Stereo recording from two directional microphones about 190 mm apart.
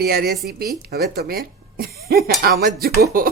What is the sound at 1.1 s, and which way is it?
Speech, 50° right (ahead or behind).